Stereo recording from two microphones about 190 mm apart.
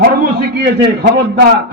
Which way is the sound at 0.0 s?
50° right (ahead or behind).